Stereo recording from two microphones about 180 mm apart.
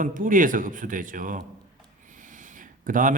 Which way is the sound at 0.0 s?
50° right (ahead or behind).